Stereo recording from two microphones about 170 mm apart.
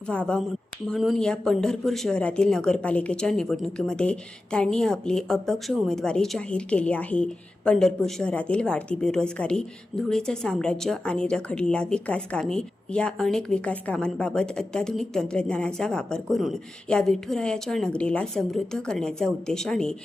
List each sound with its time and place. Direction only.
0.1 s speech: 5° left (ahead or behind)